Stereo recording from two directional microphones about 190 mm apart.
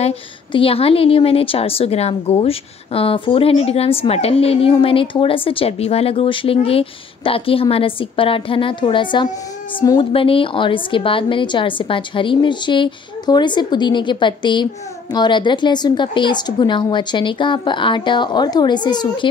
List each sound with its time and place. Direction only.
0.0 s a woman's voice: 30° left (ahead or behind)